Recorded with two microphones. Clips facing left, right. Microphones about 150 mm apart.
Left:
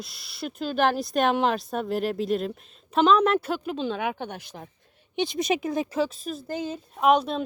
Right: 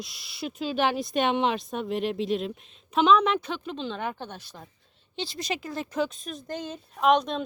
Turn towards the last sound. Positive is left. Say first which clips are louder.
# left 1 dB
turn(degrees=5)  # may be behind; listen again after turning